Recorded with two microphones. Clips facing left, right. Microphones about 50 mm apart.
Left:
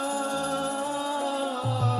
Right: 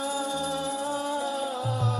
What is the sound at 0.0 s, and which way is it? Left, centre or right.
Music, left.